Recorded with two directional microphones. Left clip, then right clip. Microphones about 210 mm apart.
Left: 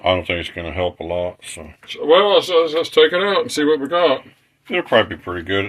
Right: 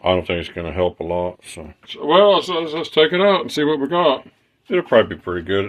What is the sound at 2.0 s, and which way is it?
Speech, 55° right (ahead or behind).